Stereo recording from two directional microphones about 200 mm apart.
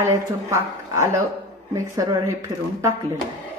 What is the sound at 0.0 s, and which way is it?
A woman's voice, 15° right (ahead or behind).